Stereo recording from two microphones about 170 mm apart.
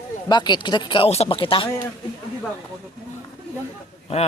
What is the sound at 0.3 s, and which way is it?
Speech, 25° left (ahead or behind).